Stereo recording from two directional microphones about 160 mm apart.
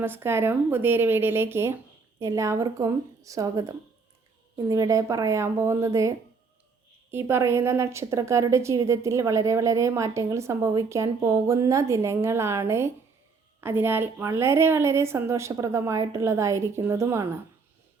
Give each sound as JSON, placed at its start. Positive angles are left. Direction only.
{"t": 0.0, "sound": "a woman's voice", "side_deg": -15}